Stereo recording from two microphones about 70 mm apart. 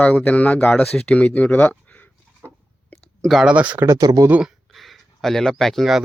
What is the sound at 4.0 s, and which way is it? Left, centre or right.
Speech, right.